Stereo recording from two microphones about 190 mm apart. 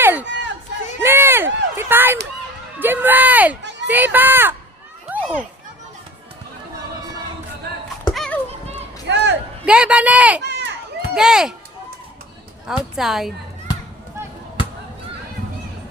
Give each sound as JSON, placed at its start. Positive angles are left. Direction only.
{"t": 0.0, "sound": "run", "side_deg": -10}
{"t": 0.3, "sound": "run", "side_deg": -65}
{"t": 1.0, "sound": "run", "side_deg": -10}
{"t": 1.7, "sound": "a sound", "side_deg": -10}
{"t": 3.8, "sound": "speech", "side_deg": -10}
{"t": 5.1, "sound": "children playing", "side_deg": -10}
{"t": 8.1, "sound": "clip-clop", "side_deg": 0}
{"t": 9.0, "sound": "a sound", "side_deg": -65}
{"t": 9.6, "sound": "speech", "side_deg": -5}
{"t": 10.4, "sound": "run", "side_deg": -65}
{"t": 11.1, "sound": "speech", "side_deg": -5}
{"t": 12.6, "sound": "speech", "side_deg": 0}